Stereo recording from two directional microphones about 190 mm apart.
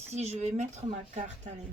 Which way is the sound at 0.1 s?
35° right (ahead or behind).